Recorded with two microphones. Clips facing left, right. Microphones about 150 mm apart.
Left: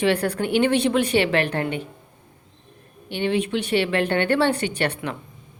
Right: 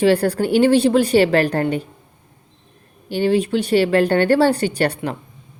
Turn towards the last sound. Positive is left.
turn(degrees=-35)  # may be behind; listen again after turning